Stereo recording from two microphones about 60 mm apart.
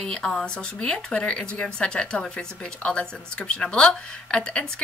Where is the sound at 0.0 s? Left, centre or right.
Centre.